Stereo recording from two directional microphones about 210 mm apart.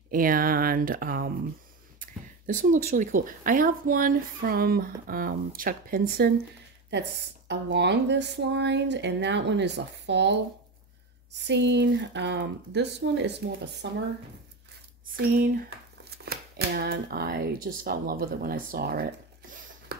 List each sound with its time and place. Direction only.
0.1 s a woman's voice: 40° right (ahead or behind)
16.0 s speech: 50° right (ahead or behind)